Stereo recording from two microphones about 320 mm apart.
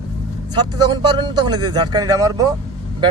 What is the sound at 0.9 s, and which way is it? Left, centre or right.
Speech, centre.